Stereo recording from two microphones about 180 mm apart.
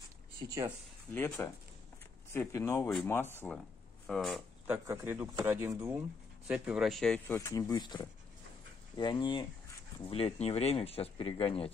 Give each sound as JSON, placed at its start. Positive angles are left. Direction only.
{"t": 1.1, "sound": "speech", "side_deg": 10}
{"t": 4.6, "sound": "speech", "side_deg": -15}
{"t": 7.3, "sound": "speech", "side_deg": 20}